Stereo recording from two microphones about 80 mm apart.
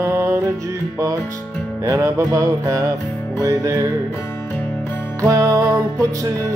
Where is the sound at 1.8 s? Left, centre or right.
Right.